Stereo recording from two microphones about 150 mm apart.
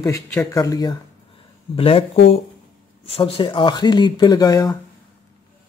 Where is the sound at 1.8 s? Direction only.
40° left (ahead or behind).